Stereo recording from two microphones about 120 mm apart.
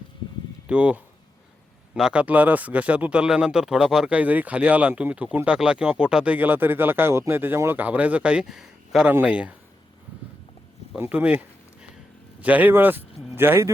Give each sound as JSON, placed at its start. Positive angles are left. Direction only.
{"t": 0.7, "sound": "speech", "side_deg": -10}
{"t": 10.9, "sound": "a sound", "side_deg": -15}
{"t": 12.4, "sound": "speech", "side_deg": -15}